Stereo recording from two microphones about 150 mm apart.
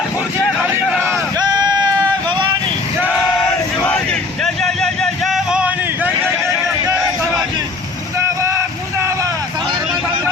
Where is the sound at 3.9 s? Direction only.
5° left (ahead or behind); by 6.3 s 10° right (ahead or behind).